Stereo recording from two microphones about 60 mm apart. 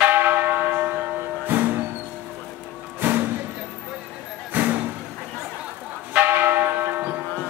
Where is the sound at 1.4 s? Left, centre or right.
Right.